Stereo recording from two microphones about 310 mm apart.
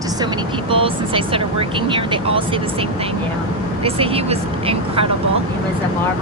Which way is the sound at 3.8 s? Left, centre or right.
Centre.